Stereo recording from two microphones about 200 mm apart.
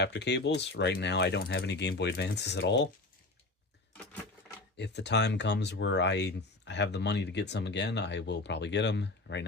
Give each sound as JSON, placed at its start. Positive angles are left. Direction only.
{"t": 0.0, "sound": "speech", "side_deg": 55}
{"t": 4.8, "sound": "speech", "side_deg": 60}